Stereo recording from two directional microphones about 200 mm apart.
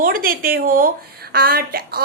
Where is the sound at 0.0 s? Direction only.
45° right (ahead or behind).